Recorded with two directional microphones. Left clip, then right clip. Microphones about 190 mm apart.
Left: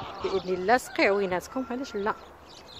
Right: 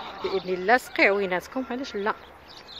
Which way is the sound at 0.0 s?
45° right (ahead or behind).